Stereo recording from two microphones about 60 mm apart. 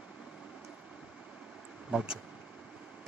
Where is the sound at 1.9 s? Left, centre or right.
Centre.